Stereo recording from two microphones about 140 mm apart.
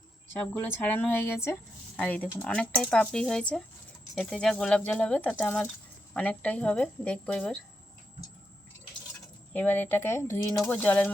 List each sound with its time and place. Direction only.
0.6 s speech: 10° left (ahead or behind)
9.5 s speech: 10° left (ahead or behind)